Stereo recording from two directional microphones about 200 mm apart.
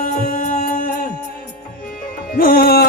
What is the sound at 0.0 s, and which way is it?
Music, 45° left (ahead or behind).